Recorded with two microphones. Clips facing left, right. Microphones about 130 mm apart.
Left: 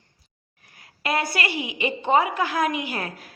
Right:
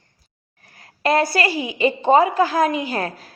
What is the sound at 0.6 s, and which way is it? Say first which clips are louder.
A woman's voice: right 9 dB; 40° right (ahead or behind).